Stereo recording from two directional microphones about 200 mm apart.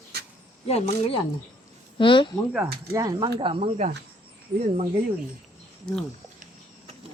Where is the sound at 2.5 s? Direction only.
10° right (ahead or behind).